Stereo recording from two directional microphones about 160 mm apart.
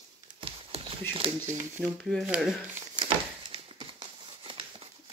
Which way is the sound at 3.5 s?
30° right (ahead or behind).